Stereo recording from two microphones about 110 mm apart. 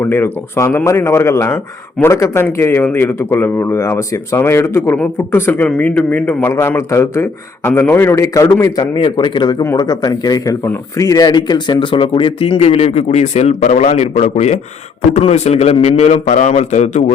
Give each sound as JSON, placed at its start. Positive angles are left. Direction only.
{"t": 0.0, "sound": "a man's voice", "side_deg": 20}
{"t": 9.0, "sound": "a man's voice", "side_deg": 45}